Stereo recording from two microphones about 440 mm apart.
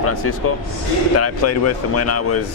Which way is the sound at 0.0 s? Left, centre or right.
Left.